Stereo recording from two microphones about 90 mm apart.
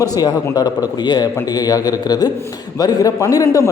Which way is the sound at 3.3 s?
40° left (ahead or behind).